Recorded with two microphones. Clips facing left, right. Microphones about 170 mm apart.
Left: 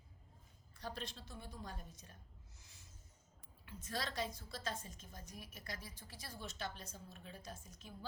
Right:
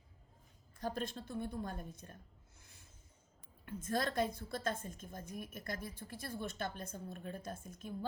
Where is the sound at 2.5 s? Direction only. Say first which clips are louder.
Right 2 dB; 55° right (ahead or behind).